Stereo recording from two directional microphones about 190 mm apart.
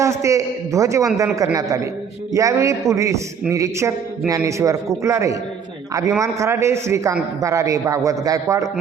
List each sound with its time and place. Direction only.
0.0 s a man's voice: 15° right (ahead or behind)